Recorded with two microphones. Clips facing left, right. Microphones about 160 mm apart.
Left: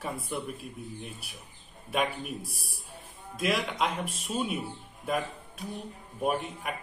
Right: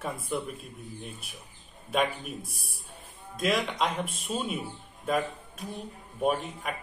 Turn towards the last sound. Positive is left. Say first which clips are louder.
# right 2 dB
turn(degrees=0)  # may be behind; listen again after turning